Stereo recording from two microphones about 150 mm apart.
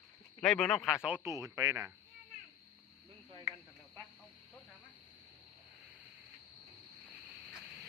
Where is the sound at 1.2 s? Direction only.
20° right (ahead or behind).